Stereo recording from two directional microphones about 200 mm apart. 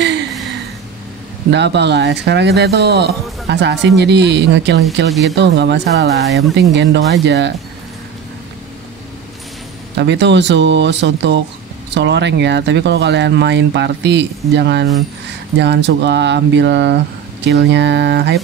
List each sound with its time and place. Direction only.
0.0 s a sound: 60° right (ahead or behind)
1.5 s speech: 60° right (ahead or behind)
9.9 s speech: 60° right (ahead or behind)